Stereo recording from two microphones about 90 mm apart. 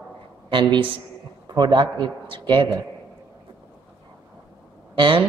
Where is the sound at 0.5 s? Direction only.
65° right (ahead or behind).